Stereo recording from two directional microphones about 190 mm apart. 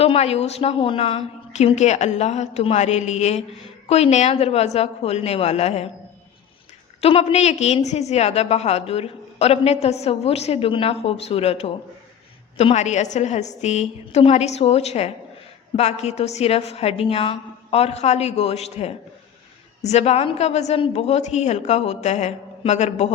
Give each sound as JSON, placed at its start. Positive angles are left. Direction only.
{"t": 0.0, "sound": "a woman's voice", "side_deg": 30}
{"t": 7.0, "sound": "a woman's voice", "side_deg": 30}